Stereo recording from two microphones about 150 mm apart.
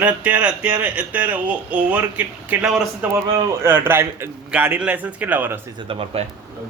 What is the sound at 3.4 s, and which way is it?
A man's voice, 15° right (ahead or behind).